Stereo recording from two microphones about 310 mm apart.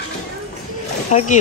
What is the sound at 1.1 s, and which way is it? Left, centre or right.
Speech, left.